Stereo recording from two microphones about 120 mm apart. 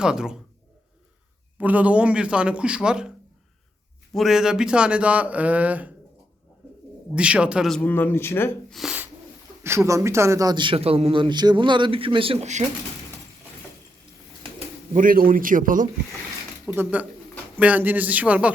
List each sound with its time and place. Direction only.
0.0 s speech: 5° right (ahead or behind)
1.5 s speech: 15° right (ahead or behind)
4.1 s speech: centre (ahead or behind)
7.2 s speech: 10° right (ahead or behind)
7.8 s speech: 15° left (ahead or behind)
8.7 s speech: centre (ahead or behind)
9.6 s a man's voice: 25° right (ahead or behind); by 10.8 s 40° right (ahead or behind)
10.8 s a man's voice: 55° right (ahead or behind)
15.5 s speech: 70° right (ahead or behind)
16.6 s speech: 10° right (ahead or behind)